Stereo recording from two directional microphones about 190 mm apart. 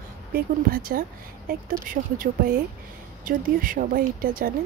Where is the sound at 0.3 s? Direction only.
50° right (ahead or behind).